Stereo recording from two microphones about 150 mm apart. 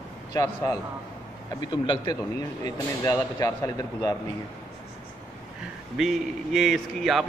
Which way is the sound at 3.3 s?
25° left (ahead or behind).